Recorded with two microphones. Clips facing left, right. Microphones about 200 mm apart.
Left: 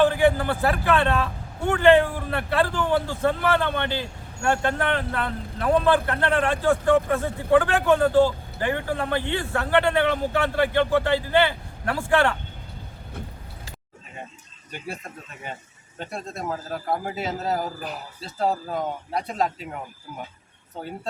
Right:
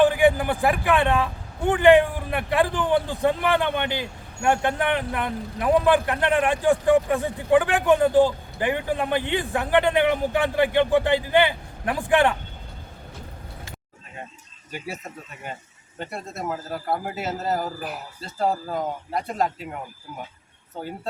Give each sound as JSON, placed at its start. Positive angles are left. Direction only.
{"t": 0.0, "sound": "speech", "side_deg": -15}
{"t": 14.7, "sound": "a man's voice", "side_deg": -5}